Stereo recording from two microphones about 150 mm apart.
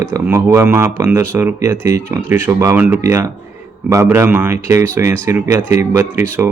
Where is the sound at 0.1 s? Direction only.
20° right (ahead or behind).